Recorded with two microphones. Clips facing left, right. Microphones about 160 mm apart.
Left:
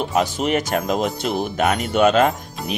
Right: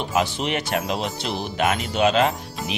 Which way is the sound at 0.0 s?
45° left (ahead or behind).